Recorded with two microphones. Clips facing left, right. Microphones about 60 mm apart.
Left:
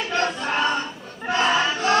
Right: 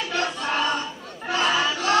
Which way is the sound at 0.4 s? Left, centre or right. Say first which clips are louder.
Left 2 dB; left.